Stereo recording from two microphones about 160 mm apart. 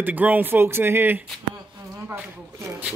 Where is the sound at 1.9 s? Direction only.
20° right (ahead or behind).